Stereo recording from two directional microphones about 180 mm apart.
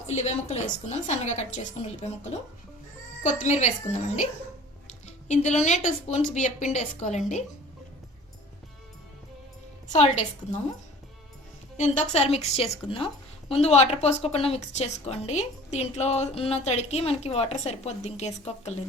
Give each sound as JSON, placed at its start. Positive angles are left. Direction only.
{"t": 0.1, "sound": "a woman's voice", "side_deg": 40}
{"t": 3.2, "sound": "a woman's voice", "side_deg": 40}
{"t": 4.9, "sound": "a woman's voice", "side_deg": 40}
{"t": 9.9, "sound": "a woman's voice", "side_deg": 40}
{"t": 11.8, "sound": "a woman's voice", "side_deg": 40}